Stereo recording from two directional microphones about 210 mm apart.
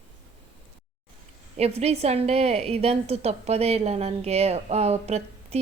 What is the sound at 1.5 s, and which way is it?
A woman's voice, 30° right (ahead or behind).